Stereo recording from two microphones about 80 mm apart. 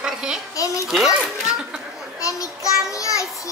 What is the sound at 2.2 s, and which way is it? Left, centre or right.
Child singing, left.